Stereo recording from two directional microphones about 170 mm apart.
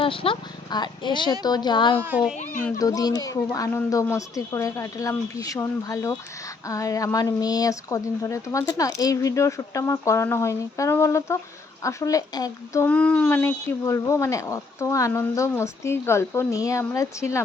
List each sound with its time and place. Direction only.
0.0 s speech: 30° left (ahead or behind)
2.0 s a child's voice: 10° right (ahead or behind)
2.3 s a child's voice: 50° left (ahead or behind)
2.7 s speech: 20° left (ahead or behind)